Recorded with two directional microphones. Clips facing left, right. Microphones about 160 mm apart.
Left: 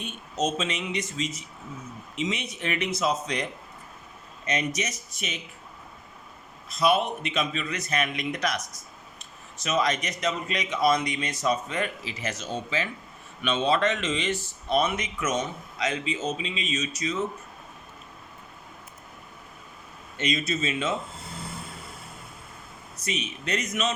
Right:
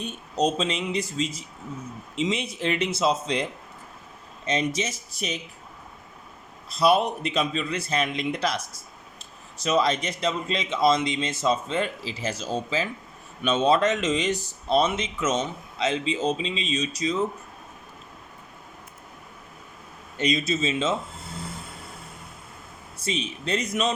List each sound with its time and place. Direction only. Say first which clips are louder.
0.0 s a man's voice: right 4 dB; 35° right (ahead or behind)
6.7 s a man's voice: right 3 dB; 35° right (ahead or behind)
14.4 s speech: right 1 dB; 30° right (ahead or behind)
20.1 s a man's voice: right 3 dB; 35° right (ahead or behind)
20.6 s speech: right 3 dB; 25° right (ahead or behind)
23.0 s a man's voice: right 3 dB; 30° right (ahead or behind)